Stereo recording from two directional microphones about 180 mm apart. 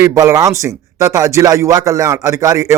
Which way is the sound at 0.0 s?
20° right (ahead or behind).